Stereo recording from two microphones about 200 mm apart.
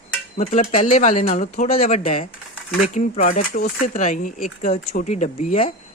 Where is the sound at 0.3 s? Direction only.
35° left (ahead or behind).